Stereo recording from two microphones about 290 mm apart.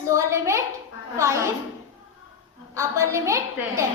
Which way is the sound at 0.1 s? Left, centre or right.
Centre.